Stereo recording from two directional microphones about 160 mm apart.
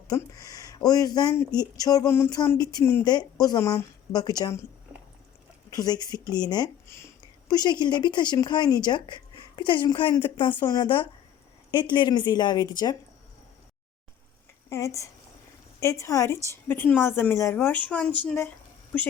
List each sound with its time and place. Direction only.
0.1 s speech: 20° left (ahead or behind)
5.7 s speech: 25° left (ahead or behind)
14.7 s speech: 20° left (ahead or behind)